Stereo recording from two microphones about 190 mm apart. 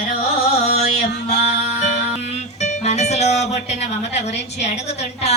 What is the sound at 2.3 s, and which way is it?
A woman's voice, 35° left (ahead or behind).